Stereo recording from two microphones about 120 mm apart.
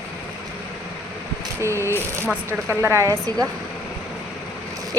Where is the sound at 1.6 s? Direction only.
20° right (ahead or behind).